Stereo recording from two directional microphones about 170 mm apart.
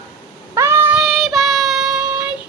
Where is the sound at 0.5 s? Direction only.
15° right (ahead or behind).